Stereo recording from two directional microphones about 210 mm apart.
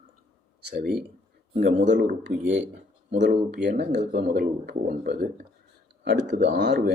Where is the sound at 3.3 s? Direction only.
45° right (ahead or behind).